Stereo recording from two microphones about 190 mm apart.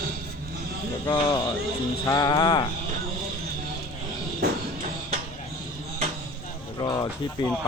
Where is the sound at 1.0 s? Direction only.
20° left (ahead or behind).